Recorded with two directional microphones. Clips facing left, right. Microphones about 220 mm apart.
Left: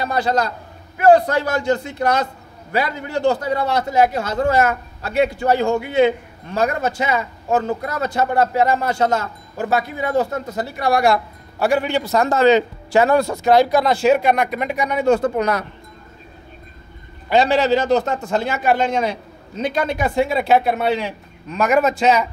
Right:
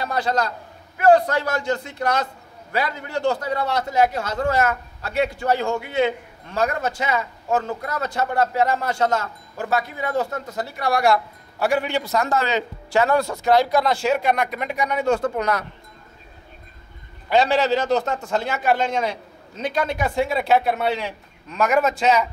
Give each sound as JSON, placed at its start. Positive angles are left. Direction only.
{"t": 0.0, "sound": "a man's voice", "side_deg": 5}
{"t": 11.6, "sound": "a man's voice", "side_deg": 30}
{"t": 17.3, "sound": "a man's voice", "side_deg": 0}